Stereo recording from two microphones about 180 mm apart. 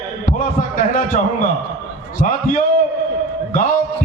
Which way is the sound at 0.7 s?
50° left (ahead or behind).